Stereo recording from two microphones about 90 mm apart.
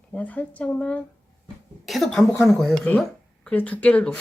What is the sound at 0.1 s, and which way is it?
Speech, 15° left (ahead or behind).